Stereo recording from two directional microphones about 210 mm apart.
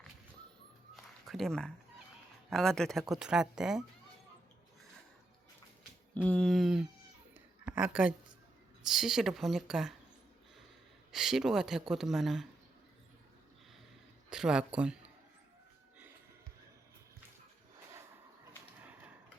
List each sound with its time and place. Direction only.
0.9 s a sound: centre (ahead or behind)
2.5 s speech: centre (ahead or behind)
6.2 s a woman's voice: 5° left (ahead or behind)
11.1 s speech: centre (ahead or behind)
14.3 s speech: 5° right (ahead or behind)